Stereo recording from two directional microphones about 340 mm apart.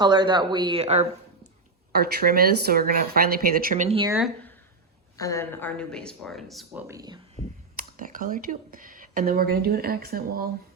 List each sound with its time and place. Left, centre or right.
0.0 s speech: centre
5.1 s speech: centre
7.4 s speech: left
7.8 s speech: right